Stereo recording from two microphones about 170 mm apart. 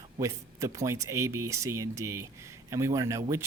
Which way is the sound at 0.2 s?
20° right (ahead or behind).